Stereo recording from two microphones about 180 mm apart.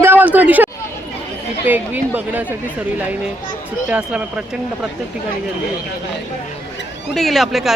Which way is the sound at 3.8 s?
5° right (ahead or behind).